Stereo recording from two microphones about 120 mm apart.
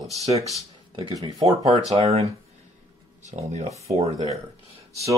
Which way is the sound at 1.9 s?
60° right (ahead or behind).